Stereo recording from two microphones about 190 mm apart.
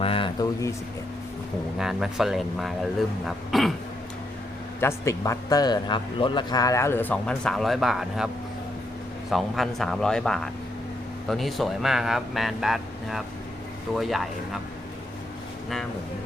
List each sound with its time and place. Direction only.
0.0 s a sound: 30° left (ahead or behind)
1.8 s speech: 5° right (ahead or behind)
4.8 s speech: 15° left (ahead or behind); by 8.3 s centre (ahead or behind)
9.3 s speech: centre (ahead or behind)